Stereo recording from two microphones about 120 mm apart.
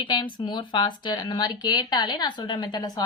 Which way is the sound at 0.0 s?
40° left (ahead or behind).